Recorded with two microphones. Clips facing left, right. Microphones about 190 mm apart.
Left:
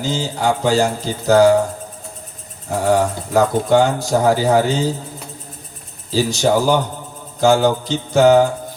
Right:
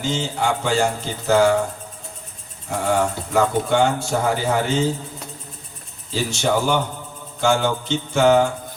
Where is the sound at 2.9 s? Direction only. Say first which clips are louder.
Left 4 dB; 35° left (ahead or behind).